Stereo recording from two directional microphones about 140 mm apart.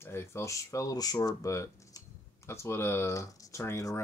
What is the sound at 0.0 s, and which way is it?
Speech, 20° left (ahead or behind).